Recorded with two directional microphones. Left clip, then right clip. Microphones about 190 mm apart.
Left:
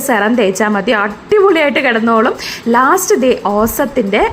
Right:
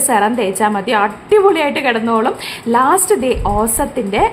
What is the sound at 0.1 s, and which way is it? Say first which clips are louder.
A woman's voice: left 3 dB; 15° left (ahead or behind).